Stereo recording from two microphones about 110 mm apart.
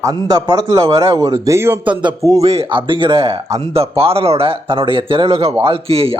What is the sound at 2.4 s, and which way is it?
Speech, 65° right (ahead or behind).